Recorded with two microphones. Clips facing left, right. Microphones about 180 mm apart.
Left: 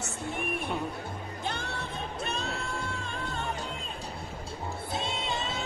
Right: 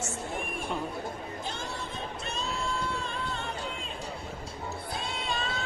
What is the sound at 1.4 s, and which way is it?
Music, 65° left (ahead or behind).